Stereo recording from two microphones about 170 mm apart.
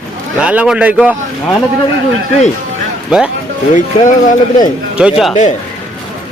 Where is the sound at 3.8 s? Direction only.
45° left (ahead or behind).